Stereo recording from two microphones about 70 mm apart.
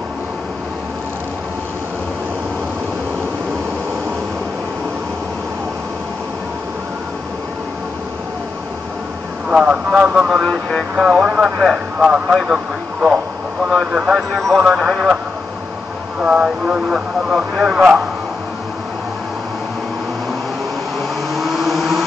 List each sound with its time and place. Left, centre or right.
9.5 s speech: centre
13.7 s speech: centre
14.3 s speech: centre
16.2 s speech: centre
21.3 s vehicle: centre